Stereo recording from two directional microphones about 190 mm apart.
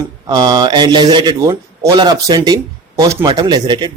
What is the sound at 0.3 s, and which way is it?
Speech, 20° right (ahead or behind).